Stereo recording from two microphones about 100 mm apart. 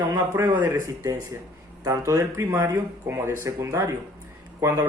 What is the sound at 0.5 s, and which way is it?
Speech, 20° right (ahead or behind).